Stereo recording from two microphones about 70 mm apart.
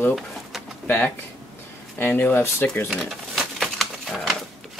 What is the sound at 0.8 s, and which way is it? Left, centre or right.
Speech, left.